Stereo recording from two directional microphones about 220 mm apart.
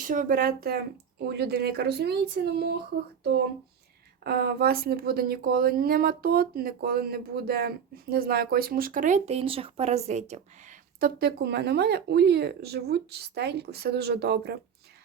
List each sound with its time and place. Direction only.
0.0 s speech: 40° right (ahead or behind)
4.2 s speech: 45° right (ahead or behind)